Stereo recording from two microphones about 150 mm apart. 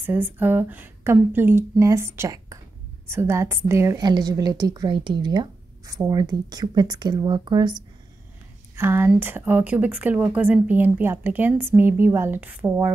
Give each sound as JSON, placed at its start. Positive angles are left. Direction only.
{"t": 0.0, "sound": "a woman's voice", "side_deg": -15}
{"t": 8.7, "sound": "speech", "side_deg": -15}